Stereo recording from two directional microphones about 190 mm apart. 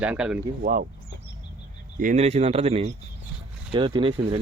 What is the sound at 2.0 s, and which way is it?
Speech, 40° right (ahead or behind).